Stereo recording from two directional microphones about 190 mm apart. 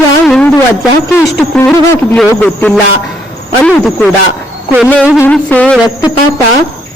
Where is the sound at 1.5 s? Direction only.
10° left (ahead or behind).